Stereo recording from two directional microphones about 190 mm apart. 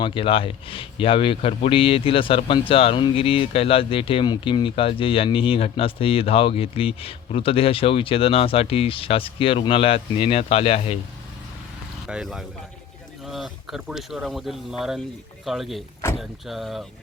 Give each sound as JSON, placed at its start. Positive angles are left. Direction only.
{"t": 0.0, "sound": "speech", "side_deg": 25}
{"t": 12.0, "sound": "speech", "side_deg": 0}